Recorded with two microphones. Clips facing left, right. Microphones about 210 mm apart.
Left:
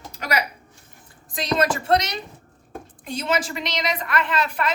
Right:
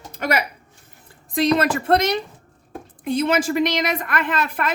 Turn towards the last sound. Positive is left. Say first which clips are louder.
# right 1 dB
turn(degrees=-50)  # may be behind; listen again after turning